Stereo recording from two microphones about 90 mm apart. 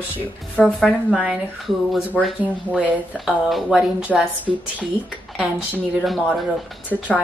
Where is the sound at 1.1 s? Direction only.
10° right (ahead or behind).